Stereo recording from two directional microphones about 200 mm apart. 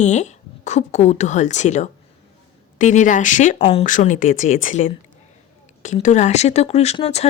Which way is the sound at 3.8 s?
40° left (ahead or behind).